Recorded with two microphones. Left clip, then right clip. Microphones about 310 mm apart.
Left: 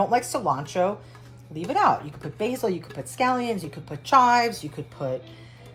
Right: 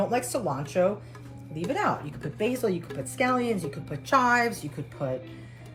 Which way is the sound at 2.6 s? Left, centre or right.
Centre.